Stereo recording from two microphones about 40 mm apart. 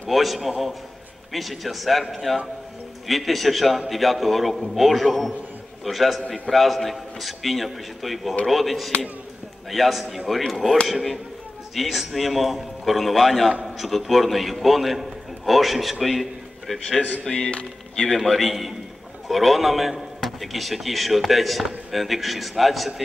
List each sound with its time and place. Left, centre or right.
0.1 s a man's voice: centre
17.2 s speech: centre
18.2 s a man's voice: centre